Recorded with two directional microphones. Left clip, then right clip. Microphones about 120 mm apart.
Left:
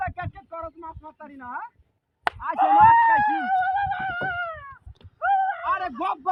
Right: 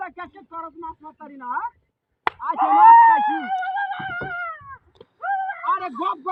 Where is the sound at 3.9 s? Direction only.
25° left (ahead or behind).